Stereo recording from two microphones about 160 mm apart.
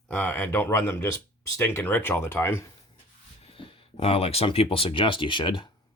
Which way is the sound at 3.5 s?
35° left (ahead or behind).